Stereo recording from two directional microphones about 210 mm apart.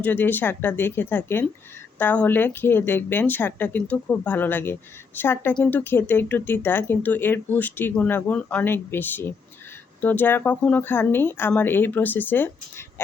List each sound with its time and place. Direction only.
0.0 s speech: 10° left (ahead or behind)